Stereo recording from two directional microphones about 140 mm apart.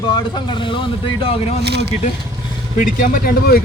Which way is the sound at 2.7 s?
80° left.